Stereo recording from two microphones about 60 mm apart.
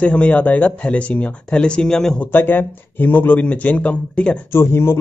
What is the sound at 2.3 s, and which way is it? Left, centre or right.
Speech, left.